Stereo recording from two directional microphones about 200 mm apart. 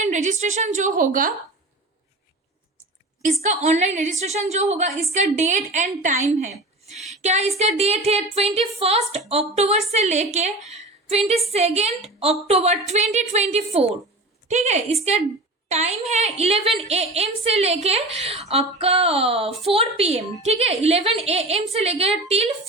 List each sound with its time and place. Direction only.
0.0 s a woman's voice: 35° right (ahead or behind)
3.4 s a woman's voice: 35° right (ahead or behind)